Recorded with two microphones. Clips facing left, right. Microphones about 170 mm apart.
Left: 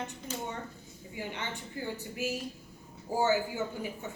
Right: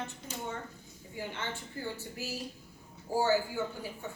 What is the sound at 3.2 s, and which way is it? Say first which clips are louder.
Speech: even; 20° left (ahead or behind).